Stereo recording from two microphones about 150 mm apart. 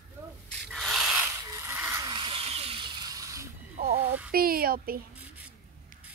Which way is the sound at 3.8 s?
75° right (ahead or behind).